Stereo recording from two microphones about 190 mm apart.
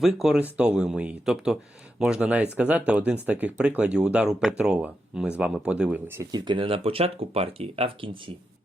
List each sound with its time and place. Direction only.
0.0 s speech: centre (ahead or behind); by 8.2 s 30° right (ahead or behind)